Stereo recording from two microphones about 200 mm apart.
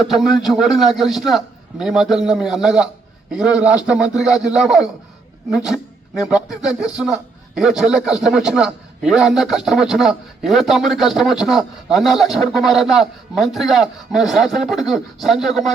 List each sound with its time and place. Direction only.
0.1 s a man's voice: centre (ahead or behind)